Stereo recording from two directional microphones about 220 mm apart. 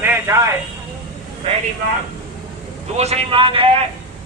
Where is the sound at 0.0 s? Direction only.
10° right (ahead or behind).